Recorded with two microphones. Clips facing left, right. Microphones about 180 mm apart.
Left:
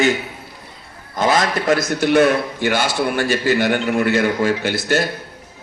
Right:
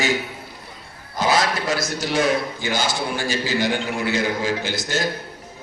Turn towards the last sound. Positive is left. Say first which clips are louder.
# left 6 dB
turn(degrees=60)  # may be behind; listen again after turning